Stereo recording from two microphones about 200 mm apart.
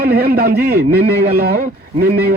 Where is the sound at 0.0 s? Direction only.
50° right (ahead or behind).